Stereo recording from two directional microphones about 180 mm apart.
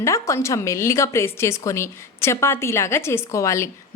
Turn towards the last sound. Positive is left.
turn(degrees=15)  # may be behind; listen again after turning